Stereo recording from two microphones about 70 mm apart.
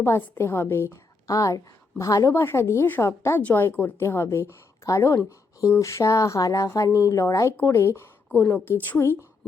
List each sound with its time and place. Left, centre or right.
0.0 s a woman's voice: left
1.3 s a woman's voice: left
2.3 s a woman's voice: left
3.4 s a woman's voice: left
4.0 s a woman's voice: left
7.5 s a woman's voice: left